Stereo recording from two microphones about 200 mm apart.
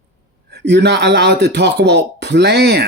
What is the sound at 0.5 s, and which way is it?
Speech, 60° right (ahead or behind).